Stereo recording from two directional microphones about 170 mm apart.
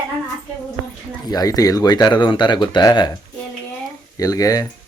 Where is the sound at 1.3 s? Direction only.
20° left (ahead or behind).